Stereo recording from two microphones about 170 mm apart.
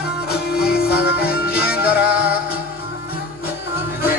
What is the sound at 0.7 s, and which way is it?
Music, 65° left (ahead or behind).